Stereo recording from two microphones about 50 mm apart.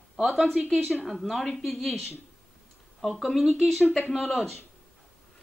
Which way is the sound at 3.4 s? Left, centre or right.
Centre.